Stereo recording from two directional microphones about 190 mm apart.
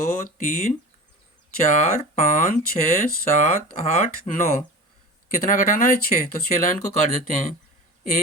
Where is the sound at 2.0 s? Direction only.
40° left (ahead or behind).